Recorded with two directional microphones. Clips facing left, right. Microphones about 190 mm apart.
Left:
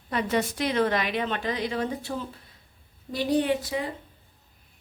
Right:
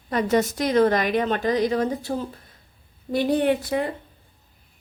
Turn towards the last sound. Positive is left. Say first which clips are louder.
# right 4 dB
turn(degrees=-55)  # may be behind; listen again after turning